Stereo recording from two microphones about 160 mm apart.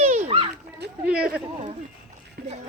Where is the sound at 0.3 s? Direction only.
35° right (ahead or behind).